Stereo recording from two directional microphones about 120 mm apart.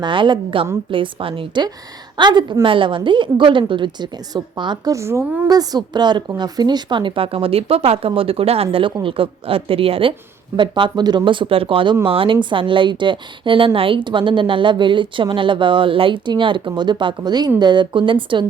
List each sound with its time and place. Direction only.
0.0 s a woman's voice: 45° right (ahead or behind)
4.9 s a woman's voice: 25° right (ahead or behind); by 18.4 s 45° right (ahead or behind)